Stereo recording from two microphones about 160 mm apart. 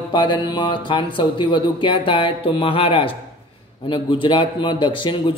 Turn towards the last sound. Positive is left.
turn(degrees=30)  # may be behind; listen again after turning